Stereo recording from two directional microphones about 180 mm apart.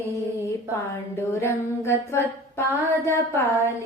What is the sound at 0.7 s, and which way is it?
A woman's voice, 15° left (ahead or behind).